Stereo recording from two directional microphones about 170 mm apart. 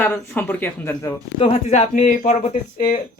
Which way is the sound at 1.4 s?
40° left (ahead or behind).